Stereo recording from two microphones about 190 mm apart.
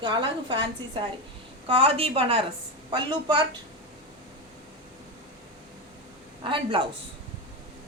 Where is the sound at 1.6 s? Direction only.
30° right (ahead or behind).